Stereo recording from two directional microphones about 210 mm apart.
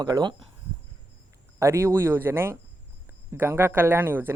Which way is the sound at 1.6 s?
15° right (ahead or behind).